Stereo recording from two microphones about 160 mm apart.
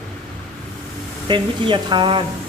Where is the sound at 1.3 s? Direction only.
30° right (ahead or behind).